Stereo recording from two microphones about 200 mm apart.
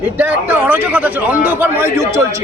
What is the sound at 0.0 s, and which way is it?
A man's voice, 10° right (ahead or behind).